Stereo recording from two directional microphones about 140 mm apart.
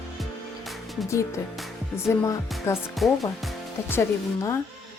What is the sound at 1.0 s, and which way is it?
Speech, 20° left (ahead or behind).